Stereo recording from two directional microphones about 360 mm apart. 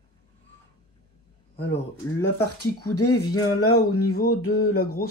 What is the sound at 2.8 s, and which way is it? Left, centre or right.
Speech, left.